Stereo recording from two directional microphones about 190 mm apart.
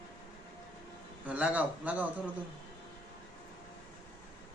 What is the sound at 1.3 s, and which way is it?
Speech, 5° right (ahead or behind).